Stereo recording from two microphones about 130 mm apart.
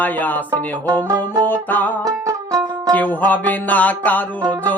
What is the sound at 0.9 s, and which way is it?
Music, 30° right (ahead or behind).